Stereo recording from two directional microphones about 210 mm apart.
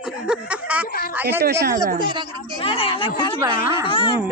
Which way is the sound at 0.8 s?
45° left (ahead or behind).